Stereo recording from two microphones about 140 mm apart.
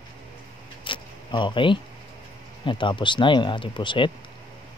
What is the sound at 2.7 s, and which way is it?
Speech, 35° left (ahead or behind).